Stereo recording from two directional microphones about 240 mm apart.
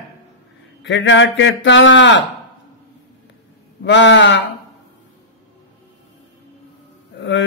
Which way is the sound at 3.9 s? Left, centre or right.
Left.